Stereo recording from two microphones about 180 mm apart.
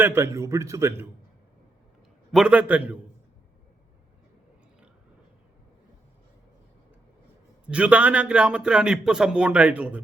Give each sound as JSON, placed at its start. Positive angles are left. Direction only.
{"t": 0.0, "sound": "a man's voice", "side_deg": -15}
{"t": 2.3, "sound": "a man's voice", "side_deg": -5}
{"t": 7.7, "sound": "a man's voice", "side_deg": -5}